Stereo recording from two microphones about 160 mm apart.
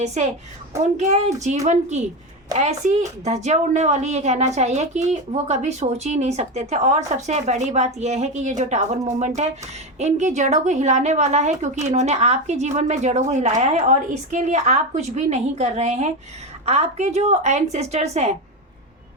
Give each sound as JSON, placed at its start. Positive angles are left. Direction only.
{"t": 0.0, "sound": "a woman's voice", "side_deg": -45}